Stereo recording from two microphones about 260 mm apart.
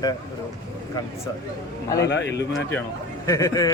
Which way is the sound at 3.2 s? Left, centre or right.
Centre.